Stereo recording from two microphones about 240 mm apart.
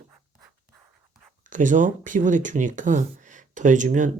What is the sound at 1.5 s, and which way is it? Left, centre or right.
Speech, right.